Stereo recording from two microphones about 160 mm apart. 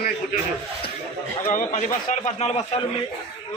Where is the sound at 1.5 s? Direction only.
50° left (ahead or behind).